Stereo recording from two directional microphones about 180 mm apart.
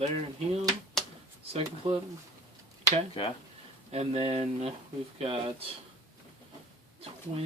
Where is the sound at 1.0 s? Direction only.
5° left (ahead or behind).